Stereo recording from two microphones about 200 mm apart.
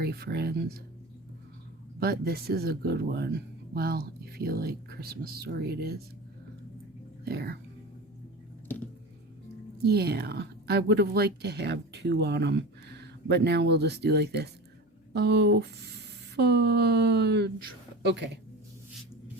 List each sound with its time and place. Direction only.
0.0 s speech: 55° right (ahead or behind)
2.0 s speech: 50° right (ahead or behind)
7.3 s speech: 50° right (ahead or behind)
8.6 s a sound: 10° left (ahead or behind)
9.7 s speech: 55° right (ahead or behind)